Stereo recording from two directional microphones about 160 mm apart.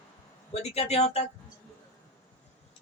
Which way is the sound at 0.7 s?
40° left (ahead or behind).